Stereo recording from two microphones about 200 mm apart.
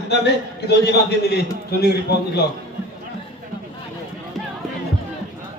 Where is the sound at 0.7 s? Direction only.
55° left (ahead or behind).